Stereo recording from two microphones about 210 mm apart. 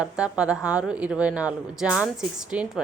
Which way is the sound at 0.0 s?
5° right (ahead or behind).